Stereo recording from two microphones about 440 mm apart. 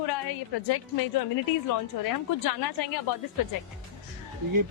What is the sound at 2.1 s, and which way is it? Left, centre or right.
A woman's voice, left.